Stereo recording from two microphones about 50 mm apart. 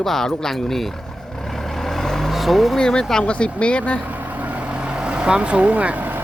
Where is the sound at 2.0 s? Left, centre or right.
Centre.